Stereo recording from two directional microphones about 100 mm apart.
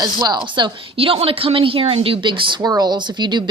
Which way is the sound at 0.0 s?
45° right (ahead or behind).